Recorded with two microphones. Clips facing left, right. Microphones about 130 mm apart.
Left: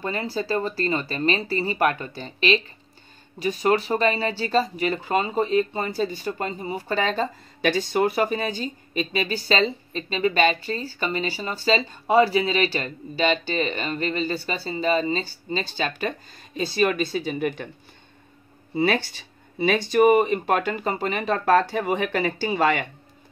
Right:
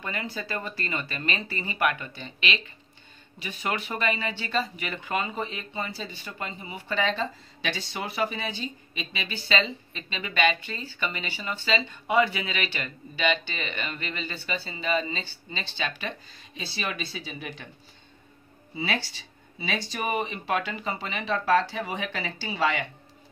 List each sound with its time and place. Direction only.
0.0 s speech: 35° left (ahead or behind); by 17.6 s 55° left (ahead or behind)
18.8 s speech: 55° left (ahead or behind)